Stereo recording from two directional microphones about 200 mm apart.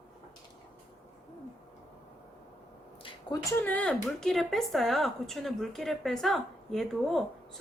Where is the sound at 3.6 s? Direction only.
5° left (ahead or behind).